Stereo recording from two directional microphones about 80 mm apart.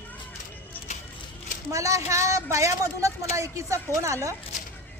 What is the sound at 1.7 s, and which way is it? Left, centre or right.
A woman's voice, right.